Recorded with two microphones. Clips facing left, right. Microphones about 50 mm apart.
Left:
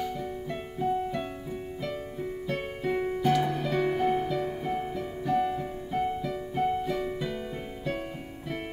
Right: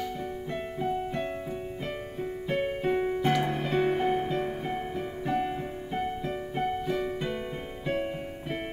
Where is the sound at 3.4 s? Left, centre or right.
Right.